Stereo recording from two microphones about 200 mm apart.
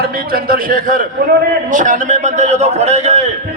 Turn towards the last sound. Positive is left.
turn(degrees=-35)  # may be behind; listen again after turning